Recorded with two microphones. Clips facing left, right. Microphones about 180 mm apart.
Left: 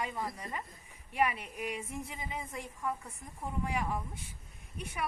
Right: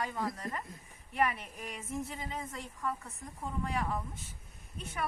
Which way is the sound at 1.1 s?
10° left (ahead or behind).